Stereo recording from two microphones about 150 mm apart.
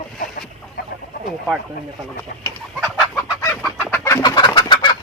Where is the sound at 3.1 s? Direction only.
15° left (ahead or behind).